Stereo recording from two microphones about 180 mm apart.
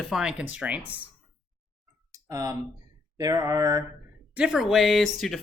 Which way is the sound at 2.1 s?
20° right (ahead or behind).